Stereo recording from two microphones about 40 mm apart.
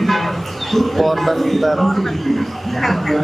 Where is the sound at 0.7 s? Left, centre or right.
Centre.